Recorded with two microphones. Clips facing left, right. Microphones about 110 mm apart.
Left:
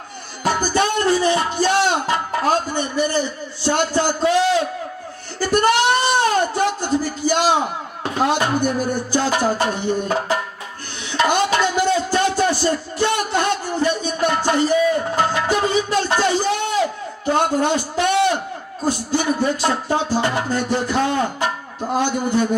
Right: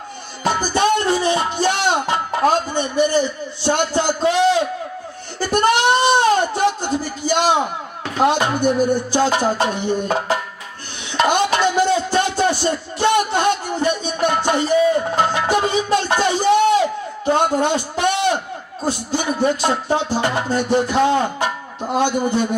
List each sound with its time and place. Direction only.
0.4 s speech: 20° right (ahead or behind)
5.5 s a sound: 20° right (ahead or behind)
8.3 s speech: 20° right (ahead or behind)
11.1 s a sound: 20° right (ahead or behind)
15.1 s music: 20° right (ahead or behind)
18.9 s a man's voice: 20° right (ahead or behind)